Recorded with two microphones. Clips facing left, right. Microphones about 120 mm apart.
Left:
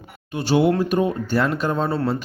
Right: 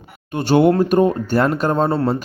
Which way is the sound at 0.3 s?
50° right (ahead or behind).